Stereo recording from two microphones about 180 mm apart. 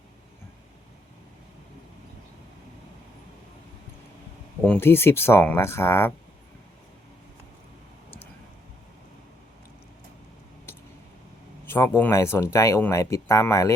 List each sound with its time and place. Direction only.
4.6 s speech: 10° left (ahead or behind)
11.6 s speech: 10° left (ahead or behind)